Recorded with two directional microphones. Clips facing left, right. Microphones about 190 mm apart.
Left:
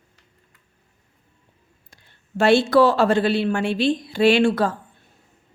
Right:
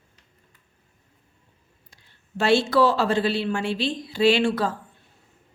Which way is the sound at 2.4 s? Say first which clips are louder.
Left 4 dB; 55° left (ahead or behind).